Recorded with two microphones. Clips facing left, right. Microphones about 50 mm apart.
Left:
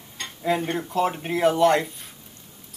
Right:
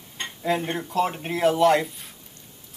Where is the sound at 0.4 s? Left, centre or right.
Centre.